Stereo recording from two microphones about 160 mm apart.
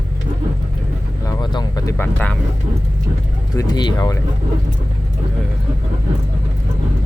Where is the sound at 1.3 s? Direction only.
25° left (ahead or behind).